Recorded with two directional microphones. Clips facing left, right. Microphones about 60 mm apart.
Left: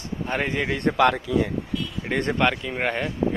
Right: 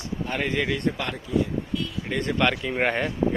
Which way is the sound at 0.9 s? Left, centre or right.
Left.